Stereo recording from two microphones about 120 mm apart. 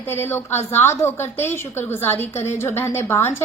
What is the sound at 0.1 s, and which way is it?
A woman's voice, 20° left (ahead or behind).